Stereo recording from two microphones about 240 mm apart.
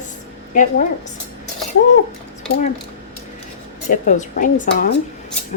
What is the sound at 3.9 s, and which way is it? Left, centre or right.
A woman's voice, left.